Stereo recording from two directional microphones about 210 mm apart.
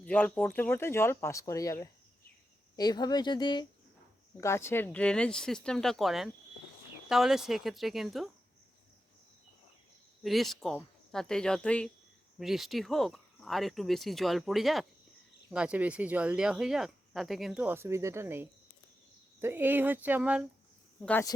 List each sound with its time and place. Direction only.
0.0 s speech: 5° left (ahead or behind)
10.2 s speech: centre (ahead or behind)
21.0 s speech: 5° left (ahead or behind)